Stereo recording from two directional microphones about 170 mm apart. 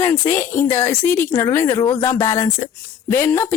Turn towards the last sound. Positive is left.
turn(degrees=15)  # may be behind; listen again after turning